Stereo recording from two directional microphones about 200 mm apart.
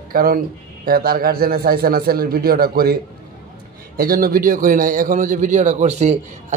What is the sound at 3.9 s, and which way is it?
A man's voice, 45° right (ahead or behind).